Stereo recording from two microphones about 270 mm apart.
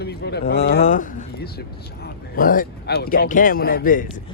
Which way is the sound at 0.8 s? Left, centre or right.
Left.